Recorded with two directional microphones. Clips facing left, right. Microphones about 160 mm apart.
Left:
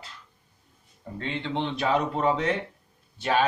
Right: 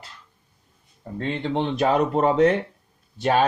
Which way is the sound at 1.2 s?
45° right (ahead or behind).